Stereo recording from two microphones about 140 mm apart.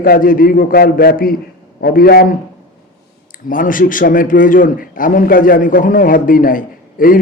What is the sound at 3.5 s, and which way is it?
A man's voice, 75° left (ahead or behind).